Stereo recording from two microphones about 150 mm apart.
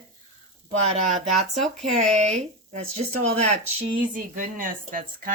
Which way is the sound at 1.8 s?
50° right (ahead or behind).